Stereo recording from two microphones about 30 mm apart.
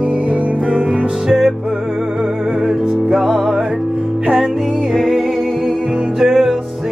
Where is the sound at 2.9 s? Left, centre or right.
Centre.